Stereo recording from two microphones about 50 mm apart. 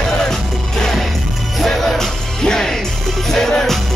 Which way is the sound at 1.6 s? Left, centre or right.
Centre.